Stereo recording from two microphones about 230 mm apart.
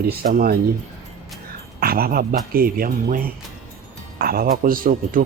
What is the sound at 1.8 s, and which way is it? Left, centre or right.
Speech, right.